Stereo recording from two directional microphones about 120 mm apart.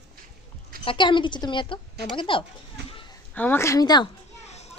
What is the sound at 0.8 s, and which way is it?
A woman's voice, 40° left (ahead or behind).